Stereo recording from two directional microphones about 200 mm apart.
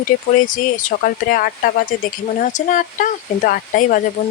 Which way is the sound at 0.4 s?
40° left (ahead or behind).